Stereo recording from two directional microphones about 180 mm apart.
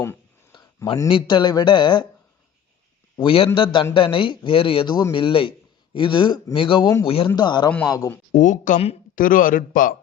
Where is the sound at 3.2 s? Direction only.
30° left (ahead or behind).